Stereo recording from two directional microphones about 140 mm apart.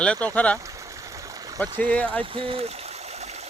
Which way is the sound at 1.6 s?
10° left (ahead or behind).